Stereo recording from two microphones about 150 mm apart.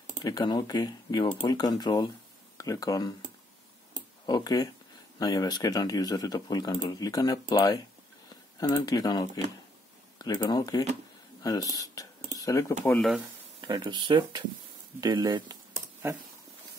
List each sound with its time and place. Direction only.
0.2 s speech: 30° left (ahead or behind)
4.3 s speech: 25° left (ahead or behind)
10.2 s speech: 25° left (ahead or behind)
11.8 s cutlery: 20° left (ahead or behind)
12.8 s speech: 5° left (ahead or behind)
13.6 s speech: 30° right (ahead or behind)